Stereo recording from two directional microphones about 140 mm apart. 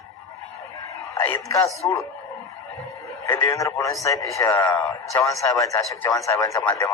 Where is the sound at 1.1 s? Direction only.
15° left (ahead or behind).